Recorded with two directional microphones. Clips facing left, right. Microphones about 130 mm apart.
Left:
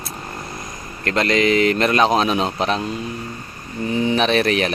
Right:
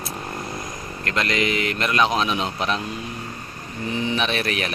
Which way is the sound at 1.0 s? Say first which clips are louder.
Left 6 dB; 35° left (ahead or behind).